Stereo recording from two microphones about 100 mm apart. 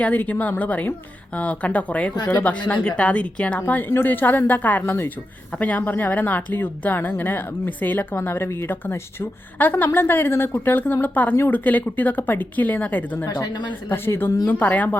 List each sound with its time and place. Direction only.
0.0 s a woman's voice: 15° left (ahead or behind)
13.4 s speech: 50° left (ahead or behind)
13.9 s a woman's voice: 20° left (ahead or behind)